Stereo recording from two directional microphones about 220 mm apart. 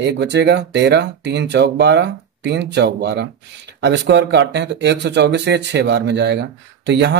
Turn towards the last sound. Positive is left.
turn(degrees=-55)  # may be behind; listen again after turning